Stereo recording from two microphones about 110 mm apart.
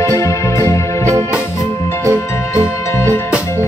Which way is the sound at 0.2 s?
25° left (ahead or behind).